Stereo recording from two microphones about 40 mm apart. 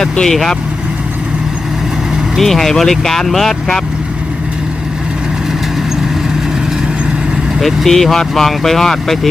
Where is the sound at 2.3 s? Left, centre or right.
Centre.